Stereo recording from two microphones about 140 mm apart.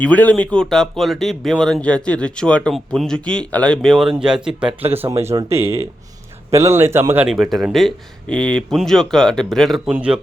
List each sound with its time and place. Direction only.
0.0 s speech: 10° left (ahead or behind); by 4.9 s 5° right (ahead or behind)
5.2 s speech: 20° right (ahead or behind)
7.3 s speech: centre (ahead or behind)